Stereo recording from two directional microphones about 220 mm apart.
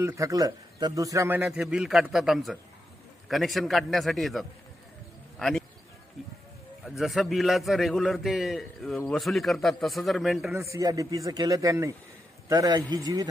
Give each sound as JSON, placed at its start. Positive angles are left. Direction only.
{"t": 0.0, "sound": "a man's voice", "side_deg": -15}
{"t": 5.4, "sound": "a sound", "side_deg": 0}
{"t": 6.8, "sound": "a man's voice", "side_deg": 0}
{"t": 10.5, "sound": "a man's voice", "side_deg": -15}